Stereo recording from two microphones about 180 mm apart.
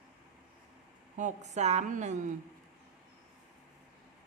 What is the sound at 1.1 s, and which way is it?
A woman's voice, 40° right (ahead or behind).